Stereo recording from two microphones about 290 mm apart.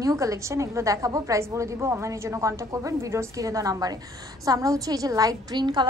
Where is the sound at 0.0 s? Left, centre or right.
Centre.